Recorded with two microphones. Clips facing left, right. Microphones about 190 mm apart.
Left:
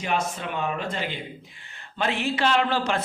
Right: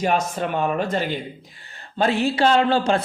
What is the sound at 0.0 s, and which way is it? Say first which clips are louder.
Speech: right 6 dB; 45° right (ahead or behind).